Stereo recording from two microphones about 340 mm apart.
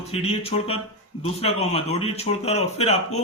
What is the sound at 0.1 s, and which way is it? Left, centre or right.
Speech, centre.